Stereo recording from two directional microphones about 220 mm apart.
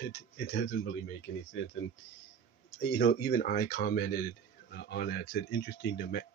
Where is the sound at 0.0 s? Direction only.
45° left (ahead or behind).